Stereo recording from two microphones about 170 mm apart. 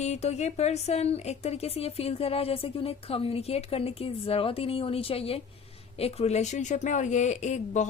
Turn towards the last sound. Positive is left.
turn(degrees=45)  # may be behind; listen again after turning